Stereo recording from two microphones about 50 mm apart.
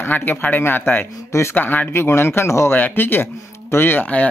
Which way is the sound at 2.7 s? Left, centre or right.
Left.